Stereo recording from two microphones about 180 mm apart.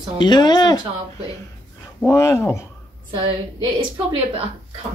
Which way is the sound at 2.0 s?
15° left (ahead or behind).